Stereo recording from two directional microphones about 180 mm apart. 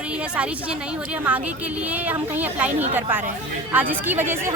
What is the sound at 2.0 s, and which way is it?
Speech, 10° right (ahead or behind).